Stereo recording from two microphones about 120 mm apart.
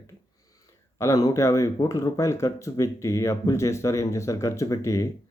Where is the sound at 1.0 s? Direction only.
30° left (ahead or behind).